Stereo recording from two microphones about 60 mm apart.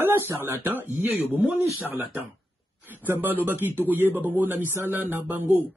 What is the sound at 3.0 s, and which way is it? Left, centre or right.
Speech, right.